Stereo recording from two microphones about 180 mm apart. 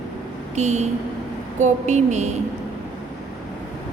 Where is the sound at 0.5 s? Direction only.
40° right (ahead or behind).